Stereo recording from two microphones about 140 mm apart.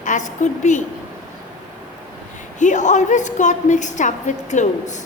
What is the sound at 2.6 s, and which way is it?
A woman's voice, 60° left (ahead or behind).